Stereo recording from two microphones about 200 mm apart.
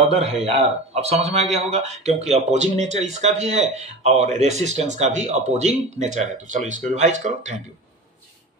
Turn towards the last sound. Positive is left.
turn(degrees=-35)  # may be behind; listen again after turning